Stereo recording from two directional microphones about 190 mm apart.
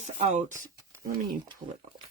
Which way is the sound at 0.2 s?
40° right (ahead or behind).